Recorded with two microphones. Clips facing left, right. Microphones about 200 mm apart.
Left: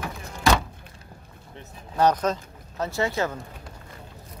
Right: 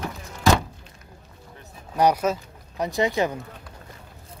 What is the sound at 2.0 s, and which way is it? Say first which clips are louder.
Speech: right 1 dB; 10° right (ahead or behind).